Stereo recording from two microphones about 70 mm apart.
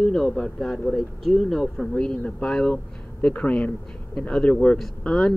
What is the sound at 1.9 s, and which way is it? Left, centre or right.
A man's voice, centre.